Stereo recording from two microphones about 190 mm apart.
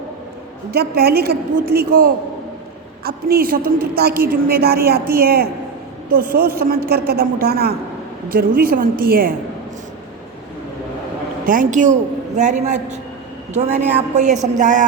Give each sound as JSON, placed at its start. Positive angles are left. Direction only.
{"t": 0.7, "sound": "a woman's voice", "side_deg": -55}
{"t": 6.6, "sound": "a woman's voice", "side_deg": -55}
{"t": 11.4, "sound": "speech", "side_deg": -40}